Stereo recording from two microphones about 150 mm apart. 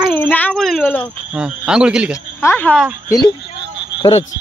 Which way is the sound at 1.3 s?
5° right (ahead or behind).